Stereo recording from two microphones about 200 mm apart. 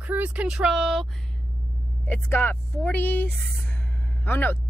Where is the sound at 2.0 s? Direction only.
10° left (ahead or behind).